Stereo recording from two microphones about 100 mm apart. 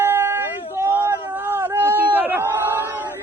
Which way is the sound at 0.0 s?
20° right (ahead or behind).